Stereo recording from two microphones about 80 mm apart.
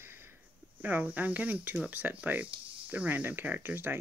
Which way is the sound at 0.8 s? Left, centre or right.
Right.